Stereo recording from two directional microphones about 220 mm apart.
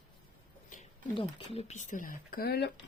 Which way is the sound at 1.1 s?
25° left (ahead or behind).